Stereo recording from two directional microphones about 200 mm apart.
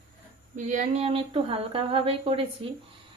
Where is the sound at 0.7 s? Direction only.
35° right (ahead or behind).